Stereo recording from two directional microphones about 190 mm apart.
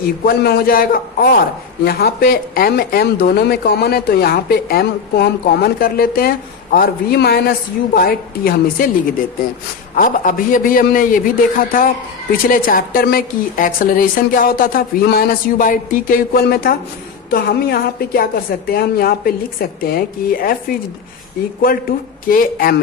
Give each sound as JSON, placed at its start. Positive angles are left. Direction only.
{"t": 0.3, "sound": "a woman's voice", "side_deg": 55}
{"t": 9.9, "sound": "a woman's voice", "side_deg": 45}